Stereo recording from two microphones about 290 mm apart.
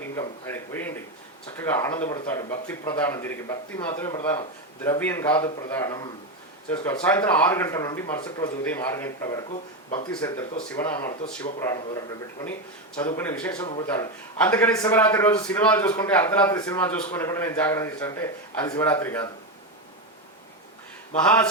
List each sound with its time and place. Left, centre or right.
0.2 s a man's voice: centre
10.1 s a man's voice: centre
21.2 s speech: centre